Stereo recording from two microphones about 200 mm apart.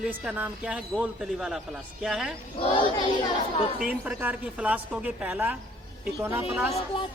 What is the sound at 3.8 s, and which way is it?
A woman's voice, 5° right (ahead or behind).